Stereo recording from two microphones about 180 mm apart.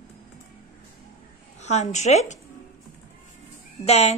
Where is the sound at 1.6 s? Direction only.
40° left (ahead or behind).